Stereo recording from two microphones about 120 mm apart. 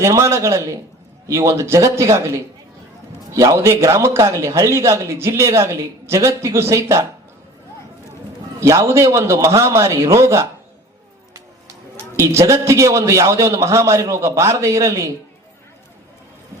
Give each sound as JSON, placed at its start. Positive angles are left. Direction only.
{"t": 0.0, "sound": "a man's voice", "side_deg": -25}
{"t": 8.6, "sound": "a man's voice", "side_deg": -25}